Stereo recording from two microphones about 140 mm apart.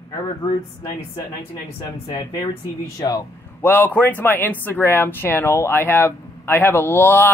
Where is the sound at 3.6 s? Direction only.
15° left (ahead or behind).